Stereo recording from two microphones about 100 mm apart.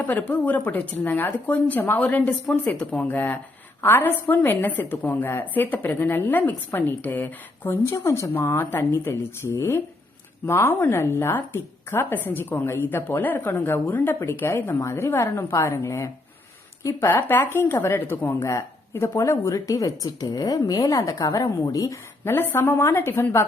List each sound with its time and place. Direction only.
0.0 s a woman's voice: 15° left (ahead or behind)
18.4 s speech: 30° left (ahead or behind)
22.2 s a woman's voice: 25° left (ahead or behind)